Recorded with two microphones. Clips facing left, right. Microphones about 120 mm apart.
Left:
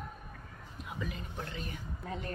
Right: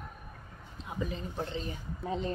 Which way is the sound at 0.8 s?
30° right (ahead or behind).